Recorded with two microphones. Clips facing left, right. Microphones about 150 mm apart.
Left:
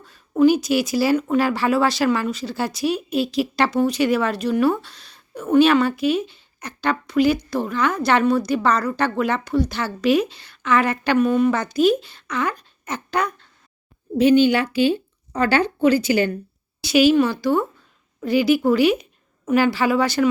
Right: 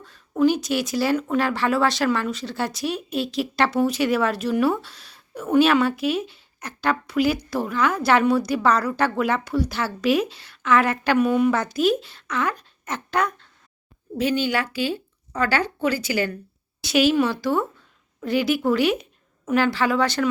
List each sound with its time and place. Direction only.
0.0 s speech: 5° left (ahead or behind)
14.2 s speech: 20° left (ahead or behind)
16.8 s speech: centre (ahead or behind)